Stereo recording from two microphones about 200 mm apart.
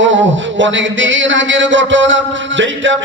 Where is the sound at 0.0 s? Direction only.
70° right (ahead or behind).